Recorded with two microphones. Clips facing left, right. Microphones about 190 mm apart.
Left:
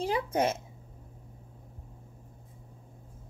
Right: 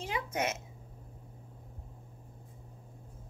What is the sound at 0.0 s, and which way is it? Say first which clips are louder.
Speech: left 6 dB; 35° left (ahead or behind).